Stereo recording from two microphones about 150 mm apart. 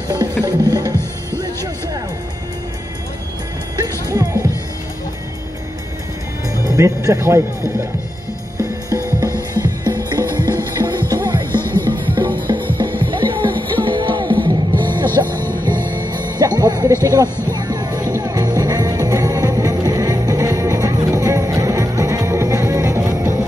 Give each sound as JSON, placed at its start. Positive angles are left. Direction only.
{"t": 0.5, "sound": "music", "side_deg": -25}
{"t": 3.7, "sound": "music", "side_deg": -25}
{"t": 6.8, "sound": "speech", "side_deg": -20}
{"t": 8.5, "sound": "music", "side_deg": -20}
{"t": 11.5, "sound": "music", "side_deg": 15}
{"t": 12.5, "sound": "music", "side_deg": -30}
{"t": 13.5, "sound": "music", "side_deg": 10}
{"t": 13.8, "sound": "music", "side_deg": -35}
{"t": 15.2, "sound": "music", "side_deg": 15}
{"t": 16.1, "sound": "music", "side_deg": -30}